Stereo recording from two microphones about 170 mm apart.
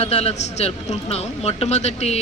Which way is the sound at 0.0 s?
35° left (ahead or behind).